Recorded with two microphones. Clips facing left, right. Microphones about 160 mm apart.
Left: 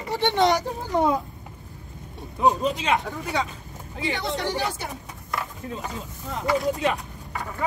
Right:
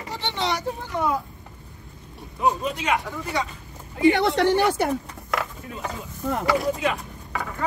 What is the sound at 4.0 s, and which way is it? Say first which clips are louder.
Speech: right 9 dB; 65° right (ahead or behind).